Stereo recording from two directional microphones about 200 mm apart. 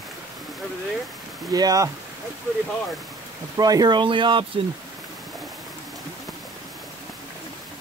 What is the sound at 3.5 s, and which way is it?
Speech, 20° right (ahead or behind).